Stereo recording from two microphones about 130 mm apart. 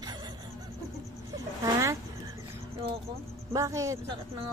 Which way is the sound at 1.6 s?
25° right (ahead or behind).